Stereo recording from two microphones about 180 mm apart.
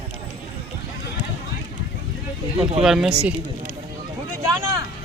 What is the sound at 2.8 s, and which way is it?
Speech, centre (ahead or behind).